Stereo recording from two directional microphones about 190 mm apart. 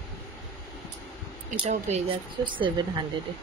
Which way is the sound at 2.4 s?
25° right (ahead or behind).